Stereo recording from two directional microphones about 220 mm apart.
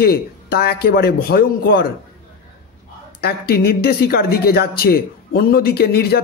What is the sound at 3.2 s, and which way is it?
Speech, 45° left (ahead or behind).